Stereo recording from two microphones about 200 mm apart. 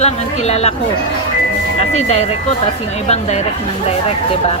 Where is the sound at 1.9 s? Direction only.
35° left (ahead or behind).